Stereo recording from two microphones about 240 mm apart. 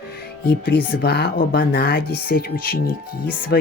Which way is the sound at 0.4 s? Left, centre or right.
Left.